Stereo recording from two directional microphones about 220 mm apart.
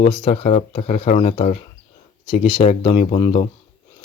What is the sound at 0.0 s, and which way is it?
Speech, 25° left (ahead or behind).